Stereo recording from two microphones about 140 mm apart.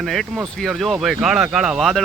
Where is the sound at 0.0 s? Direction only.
Centre (ahead or behind).